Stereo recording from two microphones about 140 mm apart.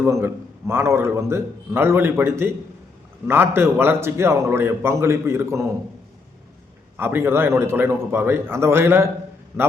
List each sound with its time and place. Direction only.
0.0 s a man's voice: 20° right (ahead or behind)
6.9 s a man's voice: 15° right (ahead or behind)